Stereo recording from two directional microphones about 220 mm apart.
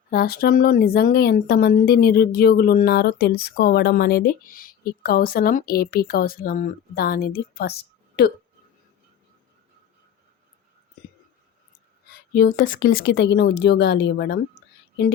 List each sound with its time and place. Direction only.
0.1 s a woman's voice: 45° left (ahead or behind)
12.0 s a woman's voice: 40° left (ahead or behind)